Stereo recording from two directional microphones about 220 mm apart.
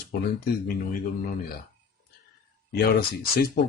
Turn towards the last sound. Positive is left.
turn(degrees=45)  # may be behind; listen again after turning